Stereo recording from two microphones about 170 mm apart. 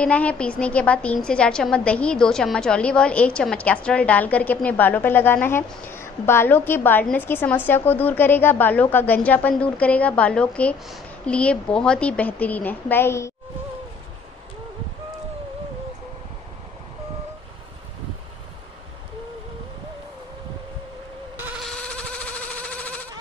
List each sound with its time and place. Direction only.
0.0 s a woman's voice: 10° left (ahead or behind)
21.6 s electric toothbrush: 5° left (ahead or behind)